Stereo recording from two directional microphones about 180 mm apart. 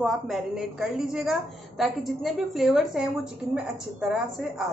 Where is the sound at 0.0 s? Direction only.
Centre (ahead or behind).